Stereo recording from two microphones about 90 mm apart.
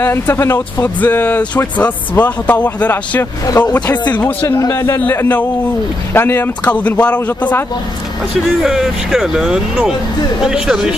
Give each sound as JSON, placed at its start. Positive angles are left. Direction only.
{"t": 0.0, "sound": "speech", "side_deg": 30}
{"t": 1.0, "sound": "speech", "side_deg": 20}
{"t": 3.4, "sound": "speech", "side_deg": 45}
{"t": 3.7, "sound": "speech", "side_deg": 15}
{"t": 4.6, "sound": "a man's voice", "side_deg": 35}
{"t": 5.0, "sound": "speech", "side_deg": 20}
{"t": 8.6, "sound": "speech", "side_deg": -5}